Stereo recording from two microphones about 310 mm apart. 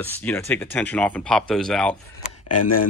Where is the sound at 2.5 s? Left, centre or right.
Left.